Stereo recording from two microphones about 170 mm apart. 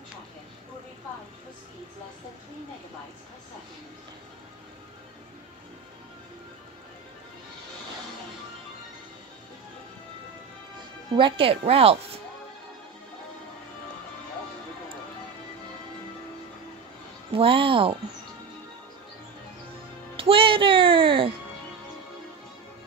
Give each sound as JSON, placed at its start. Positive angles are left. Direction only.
{"t": 11.1, "sound": "speech", "side_deg": -30}
{"t": 17.3, "sound": "speech", "side_deg": -30}
{"t": 20.2, "sound": "music", "side_deg": -30}